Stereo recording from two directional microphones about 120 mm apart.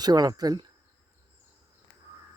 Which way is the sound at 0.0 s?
35° right (ahead or behind).